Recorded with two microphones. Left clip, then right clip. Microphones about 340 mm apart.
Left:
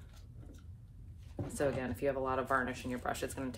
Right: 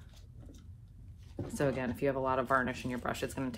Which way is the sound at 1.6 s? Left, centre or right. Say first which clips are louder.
Right 2 dB; centre.